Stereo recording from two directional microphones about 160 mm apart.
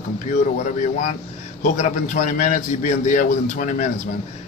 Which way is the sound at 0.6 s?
50° left (ahead or behind).